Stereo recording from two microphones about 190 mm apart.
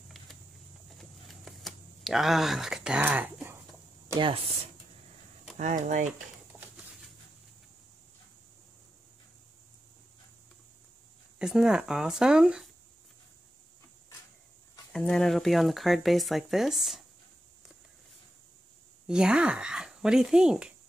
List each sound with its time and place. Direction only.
0.9 s computer keyboard: centre (ahead or behind)
4.1 s speech: 25° right (ahead or behind)
5.6 s speech: 40° right (ahead or behind)
11.3 s speech: 5° right (ahead or behind)
14.9 s speech: 5° left (ahead or behind)
19.0 s speech: 5° right (ahead or behind)